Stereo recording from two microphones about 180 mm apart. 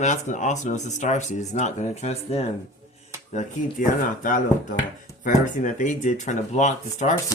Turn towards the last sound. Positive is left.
turn(degrees=40)  # may be behind; listen again after turning